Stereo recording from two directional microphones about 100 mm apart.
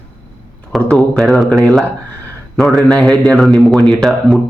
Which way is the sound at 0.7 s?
Centre (ahead or behind).